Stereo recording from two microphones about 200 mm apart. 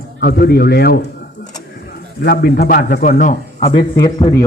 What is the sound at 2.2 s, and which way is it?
A man's voice, 50° left (ahead or behind).